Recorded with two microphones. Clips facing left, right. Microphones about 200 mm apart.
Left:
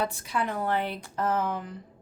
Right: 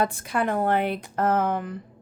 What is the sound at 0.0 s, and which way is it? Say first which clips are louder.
Speech: right 5 dB; 50° right (ahead or behind).